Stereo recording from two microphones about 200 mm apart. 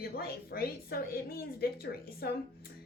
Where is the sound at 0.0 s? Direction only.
50° left (ahead or behind).